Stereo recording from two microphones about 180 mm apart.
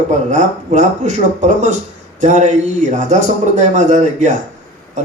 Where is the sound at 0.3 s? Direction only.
40° right (ahead or behind).